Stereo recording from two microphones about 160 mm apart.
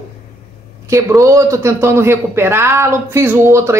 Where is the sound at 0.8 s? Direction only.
20° right (ahead or behind).